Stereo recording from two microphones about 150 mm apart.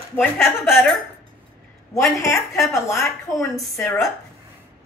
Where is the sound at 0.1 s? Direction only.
15° left (ahead or behind).